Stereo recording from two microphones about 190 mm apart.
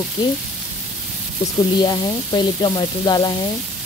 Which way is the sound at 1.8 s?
25° left (ahead or behind).